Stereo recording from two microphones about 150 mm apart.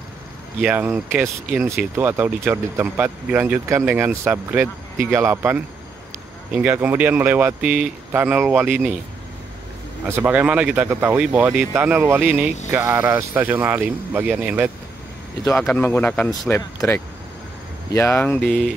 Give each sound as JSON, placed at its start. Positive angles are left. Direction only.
{"t": 0.6, "sound": "speech", "side_deg": -10}
{"t": 10.0, "sound": "speech", "side_deg": -15}
{"t": 15.4, "sound": "speech", "side_deg": 5}